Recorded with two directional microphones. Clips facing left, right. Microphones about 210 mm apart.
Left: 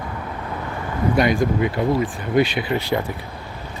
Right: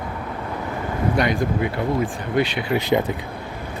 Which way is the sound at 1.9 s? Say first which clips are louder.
Left 2 dB; 5° left (ahead or behind).